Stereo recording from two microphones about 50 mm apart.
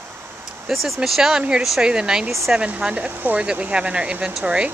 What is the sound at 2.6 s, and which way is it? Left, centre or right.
Speech, right.